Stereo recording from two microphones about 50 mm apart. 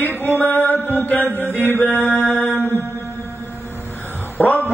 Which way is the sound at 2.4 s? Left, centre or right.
Left.